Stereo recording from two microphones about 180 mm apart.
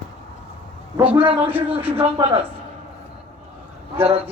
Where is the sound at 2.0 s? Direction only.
30° right (ahead or behind).